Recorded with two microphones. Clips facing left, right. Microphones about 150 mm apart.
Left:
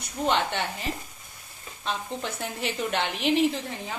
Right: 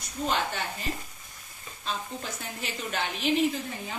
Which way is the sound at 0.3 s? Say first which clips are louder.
Left 4 dB; 70° left (ahead or behind).